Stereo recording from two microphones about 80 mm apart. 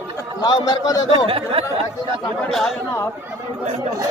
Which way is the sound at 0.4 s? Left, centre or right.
Left.